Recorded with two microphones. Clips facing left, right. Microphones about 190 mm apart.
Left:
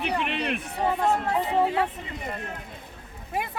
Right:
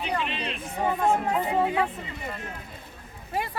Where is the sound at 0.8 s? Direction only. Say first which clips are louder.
Right 1 dB; 10° right (ahead or behind).